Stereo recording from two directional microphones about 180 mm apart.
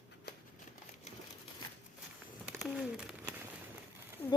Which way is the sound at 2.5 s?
5° right (ahead or behind).